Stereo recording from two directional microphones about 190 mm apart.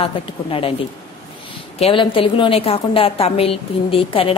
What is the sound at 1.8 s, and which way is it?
A woman's voice, 30° left (ahead or behind).